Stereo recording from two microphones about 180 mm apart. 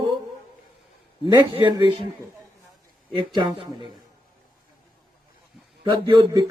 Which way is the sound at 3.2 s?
25° right (ahead or behind).